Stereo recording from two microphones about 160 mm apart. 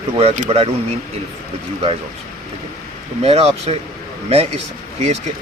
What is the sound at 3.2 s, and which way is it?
Speech, 40° right (ahead or behind).